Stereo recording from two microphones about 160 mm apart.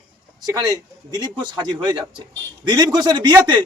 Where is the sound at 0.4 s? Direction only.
25° right (ahead or behind).